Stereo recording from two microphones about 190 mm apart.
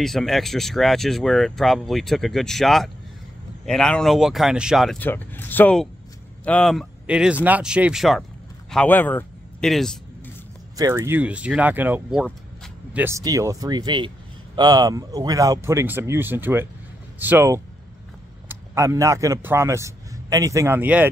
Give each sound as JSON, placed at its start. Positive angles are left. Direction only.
{"t": 0.0, "sound": "speech", "side_deg": 0}
{"t": 10.8, "sound": "a man's voice", "side_deg": -15}